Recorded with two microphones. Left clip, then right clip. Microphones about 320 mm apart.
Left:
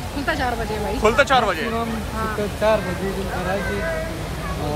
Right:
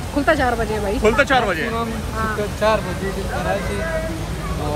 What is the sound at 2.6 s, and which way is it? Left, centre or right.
Speech, right.